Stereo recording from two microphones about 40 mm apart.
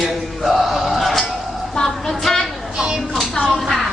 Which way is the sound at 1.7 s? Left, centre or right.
Centre.